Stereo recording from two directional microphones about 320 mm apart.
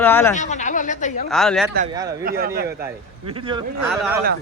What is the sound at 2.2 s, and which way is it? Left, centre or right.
Speech, right.